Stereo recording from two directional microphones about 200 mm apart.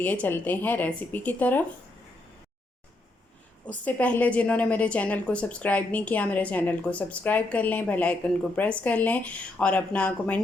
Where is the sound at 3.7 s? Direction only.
10° left (ahead or behind).